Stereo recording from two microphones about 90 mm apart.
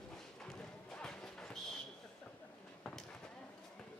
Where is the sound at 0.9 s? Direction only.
10° left (ahead or behind).